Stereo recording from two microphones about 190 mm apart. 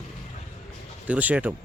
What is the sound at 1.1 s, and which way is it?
Speech, 5° right (ahead or behind).